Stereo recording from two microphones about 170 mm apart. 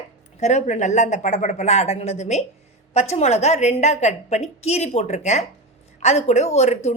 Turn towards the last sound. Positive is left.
turn(degrees=40)  # may be behind; listen again after turning